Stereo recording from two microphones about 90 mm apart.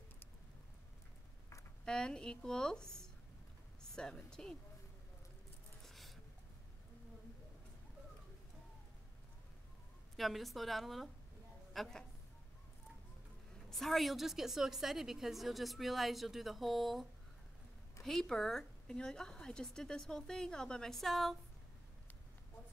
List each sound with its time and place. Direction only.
1.9 s a woman's voice: 10° left (ahead or behind)
3.9 s a woman's voice: 10° left (ahead or behind)
5.9 s a sound: centre (ahead or behind)
10.1 s a woman's voice: centre (ahead or behind)
13.7 s a woman's voice: centre (ahead or behind)
18.0 s a woman's voice: 5° left (ahead or behind)